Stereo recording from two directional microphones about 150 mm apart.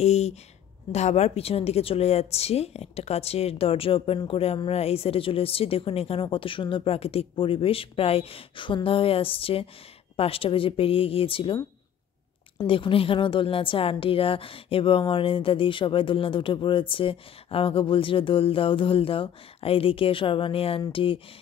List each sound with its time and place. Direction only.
0.0 s a woman's voice: 45° left (ahead or behind)
12.6 s a woman's voice: 35° left (ahead or behind)